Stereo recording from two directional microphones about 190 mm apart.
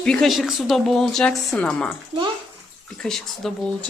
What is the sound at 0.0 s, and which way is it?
A woman's voice, 5° left (ahead or behind).